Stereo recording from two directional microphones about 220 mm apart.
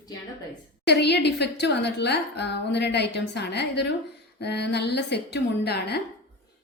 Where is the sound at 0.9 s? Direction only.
50° left (ahead or behind).